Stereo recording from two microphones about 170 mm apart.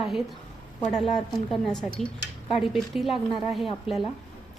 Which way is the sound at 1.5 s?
5° left (ahead or behind).